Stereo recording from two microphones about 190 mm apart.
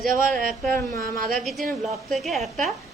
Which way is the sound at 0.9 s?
50° right (ahead or behind).